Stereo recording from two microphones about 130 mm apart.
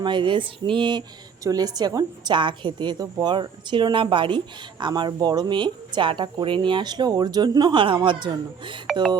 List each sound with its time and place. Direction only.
0.0 s a woman's voice: 40° right (ahead or behind)